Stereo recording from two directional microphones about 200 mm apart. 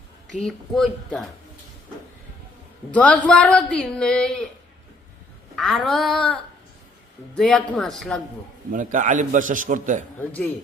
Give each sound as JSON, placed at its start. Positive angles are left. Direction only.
{"t": 0.3, "sound": "a woman's voice", "side_deg": 0}
{"t": 2.9, "sound": "a woman's voice", "side_deg": 5}
{"t": 5.5, "sound": "a woman's voice", "side_deg": 0}
{"t": 8.7, "sound": "a man's voice", "side_deg": -40}
{"t": 10.2, "sound": "a man's voice", "side_deg": 10}